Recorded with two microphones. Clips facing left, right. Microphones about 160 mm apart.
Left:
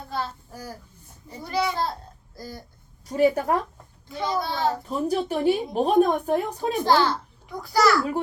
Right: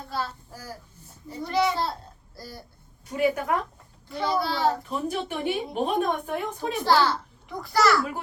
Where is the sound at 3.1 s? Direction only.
35° left (ahead or behind).